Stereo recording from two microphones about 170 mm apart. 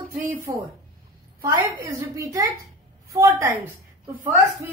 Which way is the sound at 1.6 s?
20° right (ahead or behind).